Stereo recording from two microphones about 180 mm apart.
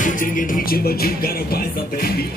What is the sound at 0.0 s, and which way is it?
Music, 50° left (ahead or behind).